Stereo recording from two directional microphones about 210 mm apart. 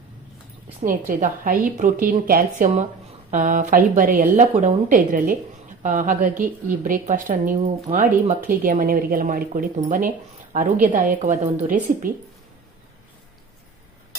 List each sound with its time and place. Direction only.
0.8 s a woman's voice: 40° right (ahead or behind)